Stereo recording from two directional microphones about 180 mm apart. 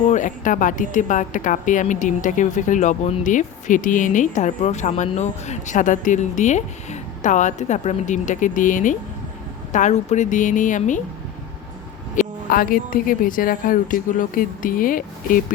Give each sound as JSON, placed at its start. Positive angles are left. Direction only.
{"t": 0.0, "sound": "speech", "side_deg": 45}
{"t": 12.1, "sound": "speech", "side_deg": 50}